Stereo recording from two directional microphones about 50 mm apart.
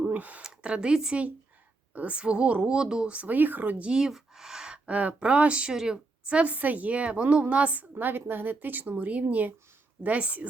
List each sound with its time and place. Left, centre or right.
0.0 s a sound: right
0.4 s speech: centre
1.9 s a woman's voice: right
2.1 s speech: right
3.3 s a woman's voice: right
3.9 s speech: centre
4.9 s speech: right
5.7 s a woman's voice: centre
6.2 s a woman's voice: right